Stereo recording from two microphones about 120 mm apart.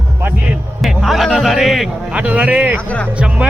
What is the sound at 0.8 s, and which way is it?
A man's voice, centre (ahead or behind).